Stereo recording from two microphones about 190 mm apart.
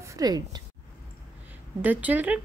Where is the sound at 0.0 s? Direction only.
20° right (ahead or behind).